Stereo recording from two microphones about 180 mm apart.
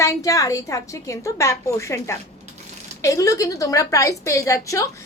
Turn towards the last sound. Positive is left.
turn(degrees=15)  # may be behind; listen again after turning